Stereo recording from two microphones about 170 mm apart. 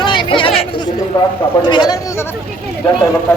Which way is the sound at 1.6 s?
25° left (ahead or behind).